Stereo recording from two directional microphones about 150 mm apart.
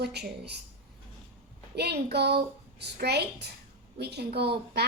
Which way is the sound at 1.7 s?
90° right.